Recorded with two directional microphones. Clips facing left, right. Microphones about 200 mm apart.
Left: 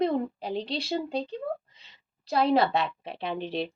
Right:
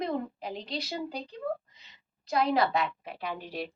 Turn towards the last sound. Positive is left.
turn(degrees=25)  # may be behind; listen again after turning